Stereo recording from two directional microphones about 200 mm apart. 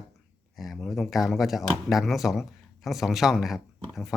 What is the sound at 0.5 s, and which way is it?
Speech, centre (ahead or behind).